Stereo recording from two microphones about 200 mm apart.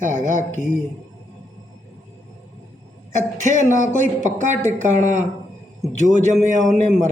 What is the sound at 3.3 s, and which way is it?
Speech, 40° right (ahead or behind).